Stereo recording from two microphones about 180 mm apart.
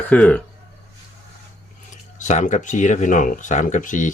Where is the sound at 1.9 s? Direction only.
40° left (ahead or behind).